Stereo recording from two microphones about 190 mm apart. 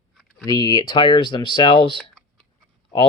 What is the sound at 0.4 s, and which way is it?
Speech, 20° left (ahead or behind).